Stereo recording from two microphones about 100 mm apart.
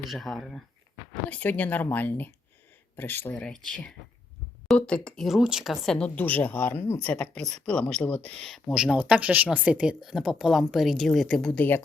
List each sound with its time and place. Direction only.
0.1 s speech: centre (ahead or behind)
1.3 s speech: 15° left (ahead or behind)
3.4 s speech: 10° left (ahead or behind)
6.1 s speech: 15° left (ahead or behind)
7.0 s speech: 10° left (ahead or behind)
8.7 s speech: 10° right (ahead or behind)
10.0 s speech: 5° right (ahead or behind); by 11.8 s 15° left (ahead or behind)